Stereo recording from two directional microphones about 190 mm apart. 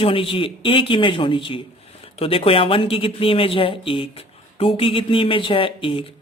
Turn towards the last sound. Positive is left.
turn(degrees=25)  # may be behind; listen again after turning